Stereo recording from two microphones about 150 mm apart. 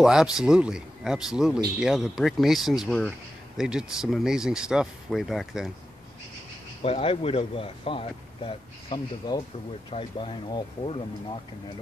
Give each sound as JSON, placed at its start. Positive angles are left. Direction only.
{"t": 0.0, "sound": "speech", "side_deg": -5}
{"t": 6.8, "sound": "speech", "side_deg": 40}